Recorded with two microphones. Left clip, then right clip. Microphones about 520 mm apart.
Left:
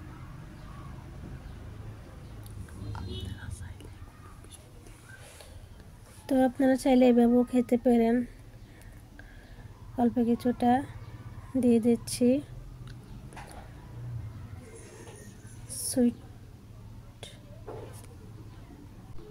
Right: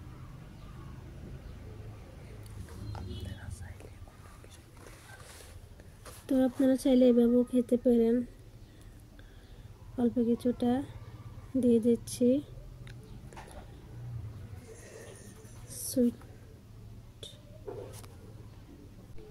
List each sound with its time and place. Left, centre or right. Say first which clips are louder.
6.2 s speech: left 3 dB; right
9.9 s speech: left 2 dB; right
15.7 s a sound: left 2 dB; right